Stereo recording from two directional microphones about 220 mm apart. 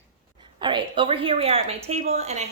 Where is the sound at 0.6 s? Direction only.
20° right (ahead or behind).